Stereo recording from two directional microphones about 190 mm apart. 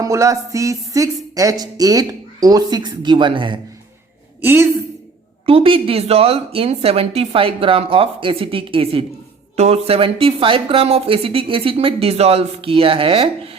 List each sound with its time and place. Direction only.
0.0 s speech: 15° right (ahead or behind)
4.4 s a woman's voice: 10° right (ahead or behind)
5.5 s speech: 30° right (ahead or behind)